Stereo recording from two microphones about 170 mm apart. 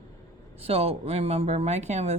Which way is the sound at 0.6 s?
35° right (ahead or behind).